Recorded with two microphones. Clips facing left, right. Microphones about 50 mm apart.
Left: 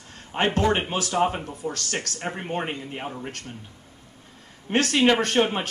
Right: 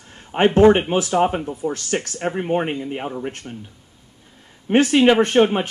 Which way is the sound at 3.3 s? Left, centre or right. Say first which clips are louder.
Right 5 dB; right.